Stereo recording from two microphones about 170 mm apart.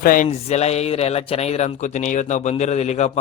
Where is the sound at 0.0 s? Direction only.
55° left (ahead or behind).